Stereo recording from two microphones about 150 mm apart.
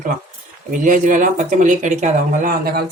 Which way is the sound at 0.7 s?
60° right (ahead or behind).